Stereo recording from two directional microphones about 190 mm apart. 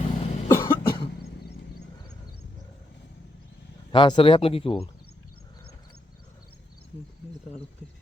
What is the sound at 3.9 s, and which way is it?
Speech, 25° left (ahead or behind).